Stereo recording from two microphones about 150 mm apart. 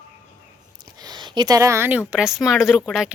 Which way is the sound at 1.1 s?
30° right (ahead or behind).